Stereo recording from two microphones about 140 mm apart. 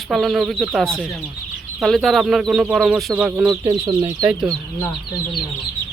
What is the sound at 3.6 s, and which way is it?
Speech, 30° right (ahead or behind).